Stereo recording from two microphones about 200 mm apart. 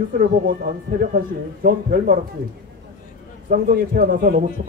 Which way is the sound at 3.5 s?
45° right (ahead or behind).